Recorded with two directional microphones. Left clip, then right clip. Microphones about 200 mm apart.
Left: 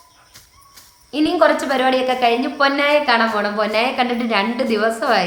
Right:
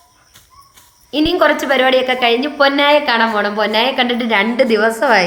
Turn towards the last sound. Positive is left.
turn(degrees=-15)  # may be behind; listen again after turning